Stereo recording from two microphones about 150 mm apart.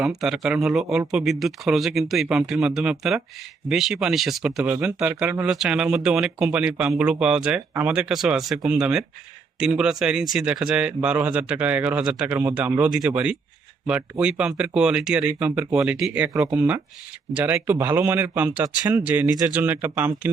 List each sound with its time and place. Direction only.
0.0 s a man's voice: centre (ahead or behind)
16.3 s speech: 25° right (ahead or behind)
17.3 s a man's voice: 15° right (ahead or behind)